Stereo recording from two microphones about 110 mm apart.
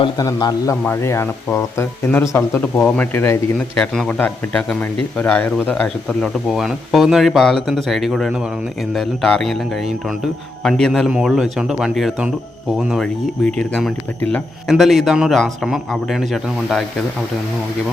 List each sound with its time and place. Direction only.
0.2 s a man's voice: 35° left (ahead or behind)
0.9 s speech: 20° left (ahead or behind)
3.8 s a man's voice: 5° left (ahead or behind)